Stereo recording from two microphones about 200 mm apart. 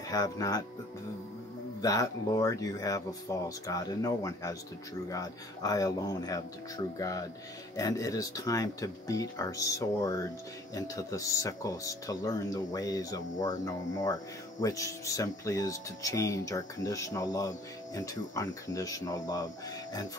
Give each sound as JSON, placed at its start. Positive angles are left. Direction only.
{"t": 0.1, "sound": "speech", "side_deg": 15}
{"t": 1.8, "sound": "speech", "side_deg": 15}